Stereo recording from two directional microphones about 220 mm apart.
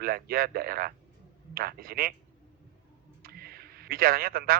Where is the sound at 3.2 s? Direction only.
45° right (ahead or behind).